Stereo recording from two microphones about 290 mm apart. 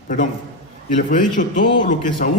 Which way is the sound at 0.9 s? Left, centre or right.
Left.